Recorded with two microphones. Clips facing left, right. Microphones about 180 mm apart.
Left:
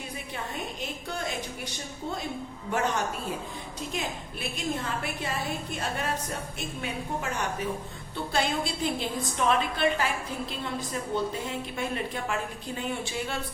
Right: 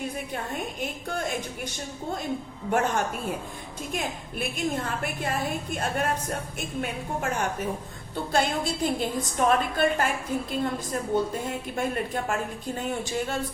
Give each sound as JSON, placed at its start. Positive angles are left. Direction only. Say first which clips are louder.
{"t": 0.5, "sound": "a woman's voice", "louder": "right 3 dB", "side_deg": -50}
{"t": 2.7, "sound": "a woman's voice", "louder": "right 3 dB", "side_deg": -50}